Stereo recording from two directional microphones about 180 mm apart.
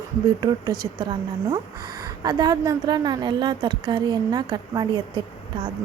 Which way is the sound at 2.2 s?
20° right (ahead or behind).